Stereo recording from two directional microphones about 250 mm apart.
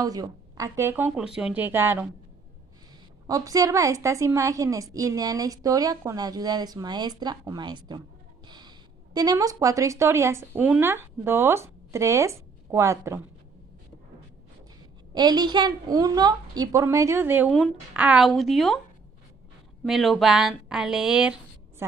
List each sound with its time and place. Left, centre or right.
0.0 s a woman's voice: centre
3.3 s a woman's voice: centre
15.1 s a woman's voice: centre
19.8 s speech: centre